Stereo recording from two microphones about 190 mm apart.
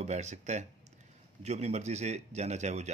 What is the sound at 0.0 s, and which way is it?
Speech, 35° right (ahead or behind).